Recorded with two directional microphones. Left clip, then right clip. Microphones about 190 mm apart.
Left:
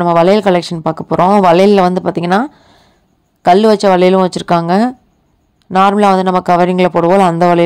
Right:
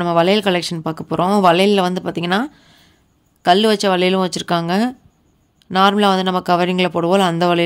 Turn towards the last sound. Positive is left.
turn(degrees=20)  # may be behind; listen again after turning